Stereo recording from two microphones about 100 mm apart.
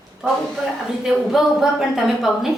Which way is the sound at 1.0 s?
5° right (ahead or behind).